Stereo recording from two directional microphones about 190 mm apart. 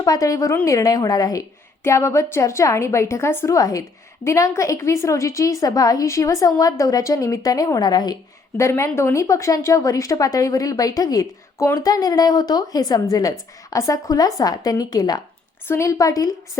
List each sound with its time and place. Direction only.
0.0 s a woman's voice: 20° left (ahead or behind)